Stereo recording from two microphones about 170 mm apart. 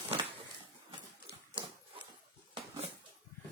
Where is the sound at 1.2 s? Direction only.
30° right (ahead or behind).